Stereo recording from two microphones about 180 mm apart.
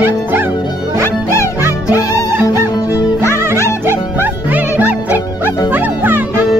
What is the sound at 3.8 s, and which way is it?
Music, 10° right (ahead or behind).